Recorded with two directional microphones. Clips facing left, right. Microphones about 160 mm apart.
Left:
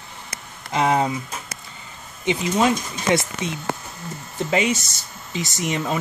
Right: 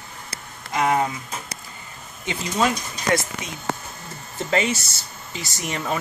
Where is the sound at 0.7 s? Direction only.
25° left (ahead or behind).